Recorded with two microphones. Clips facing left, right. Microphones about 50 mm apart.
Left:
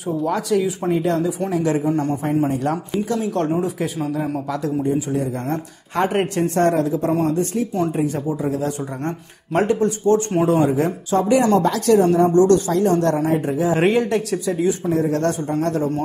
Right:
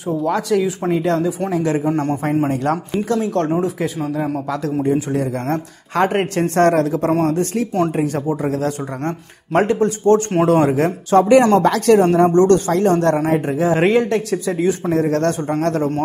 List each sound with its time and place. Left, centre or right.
0.2 s speech: right
6.3 s speech: right
13.7 s speech: right
14.4 s speech: right